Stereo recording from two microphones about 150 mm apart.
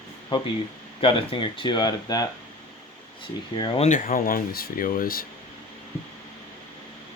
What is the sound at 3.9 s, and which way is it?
Speech, 65° left (ahead or behind).